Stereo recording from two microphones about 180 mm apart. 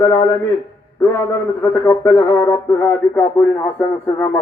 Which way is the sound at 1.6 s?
15° left (ahead or behind).